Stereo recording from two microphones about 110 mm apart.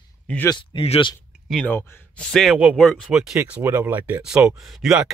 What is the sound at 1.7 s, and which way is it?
Speech, 20° left (ahead or behind).